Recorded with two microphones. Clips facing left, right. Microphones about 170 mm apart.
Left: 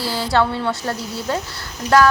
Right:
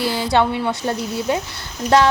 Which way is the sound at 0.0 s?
20° right (ahead or behind).